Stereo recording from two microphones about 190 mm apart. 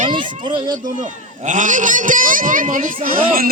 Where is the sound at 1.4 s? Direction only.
40° right (ahead or behind).